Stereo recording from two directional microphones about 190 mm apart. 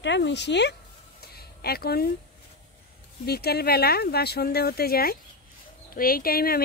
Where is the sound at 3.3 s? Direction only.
55° left (ahead or behind).